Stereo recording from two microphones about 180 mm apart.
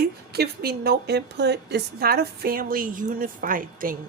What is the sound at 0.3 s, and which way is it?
Speech, 60° right (ahead or behind).